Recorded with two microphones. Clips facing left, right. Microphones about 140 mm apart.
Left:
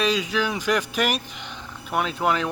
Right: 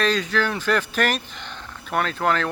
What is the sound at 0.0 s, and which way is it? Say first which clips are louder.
Speech: right 1 dB; 10° left (ahead or behind).